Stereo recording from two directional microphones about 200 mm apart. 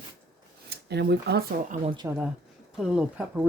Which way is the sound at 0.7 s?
55° right (ahead or behind).